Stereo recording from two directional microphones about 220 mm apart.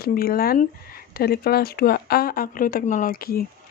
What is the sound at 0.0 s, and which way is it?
Speech, 40° left (ahead or behind).